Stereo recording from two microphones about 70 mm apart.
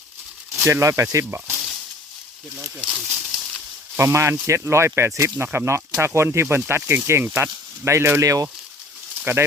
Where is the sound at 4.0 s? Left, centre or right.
Right.